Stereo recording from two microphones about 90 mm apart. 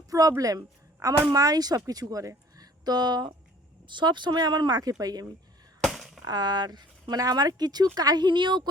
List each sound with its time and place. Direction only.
0.1 s a woman's voice: 40° right (ahead or behind)
5.9 s a sound: centre (ahead or behind)
6.2 s a woman's voice: 50° right (ahead or behind)